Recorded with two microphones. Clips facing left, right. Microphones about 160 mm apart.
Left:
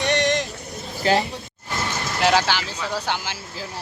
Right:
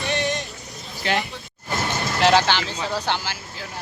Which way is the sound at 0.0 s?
70° left (ahead or behind).